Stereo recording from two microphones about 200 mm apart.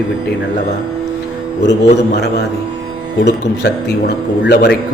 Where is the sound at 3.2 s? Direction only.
60° left (ahead or behind).